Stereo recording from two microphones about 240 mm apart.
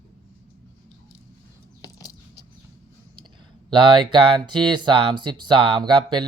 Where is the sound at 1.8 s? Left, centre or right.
Centre.